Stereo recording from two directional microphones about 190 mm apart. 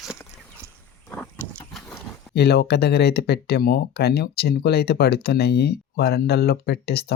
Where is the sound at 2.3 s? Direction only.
60° left (ahead or behind).